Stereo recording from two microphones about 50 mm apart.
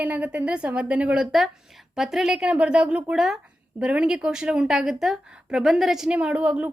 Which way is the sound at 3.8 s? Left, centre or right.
Right.